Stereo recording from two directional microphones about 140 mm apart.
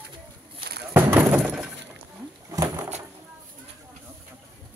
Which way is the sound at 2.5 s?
25° right (ahead or behind).